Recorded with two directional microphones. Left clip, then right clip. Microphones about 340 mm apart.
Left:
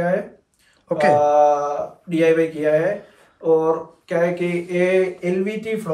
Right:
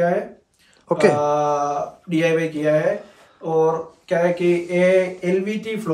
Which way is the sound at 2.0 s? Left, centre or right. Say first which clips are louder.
Left 3 dB; centre.